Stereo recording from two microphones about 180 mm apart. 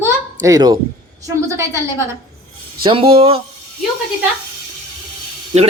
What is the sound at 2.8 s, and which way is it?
Speech, 30° right (ahead or behind).